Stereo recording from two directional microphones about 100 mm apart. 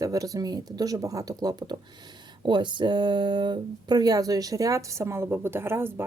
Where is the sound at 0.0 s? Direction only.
35° right (ahead or behind).